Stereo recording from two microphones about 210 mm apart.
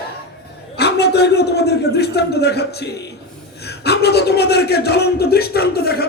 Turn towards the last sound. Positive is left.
turn(degrees=50)  # may be behind; listen again after turning